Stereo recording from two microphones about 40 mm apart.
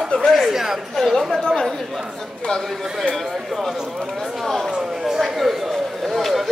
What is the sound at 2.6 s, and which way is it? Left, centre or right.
A man's voice, centre.